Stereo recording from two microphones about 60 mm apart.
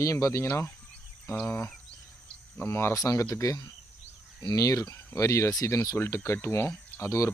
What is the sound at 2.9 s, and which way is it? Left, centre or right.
Speech, left.